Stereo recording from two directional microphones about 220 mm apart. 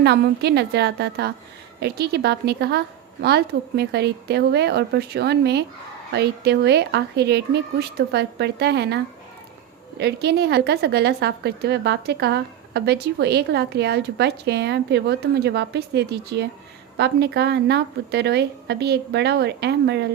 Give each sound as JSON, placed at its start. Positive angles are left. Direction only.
{"t": 0.0, "sound": "a woman's voice", "side_deg": -50}
{"t": 10.0, "sound": "a woman's voice", "side_deg": -50}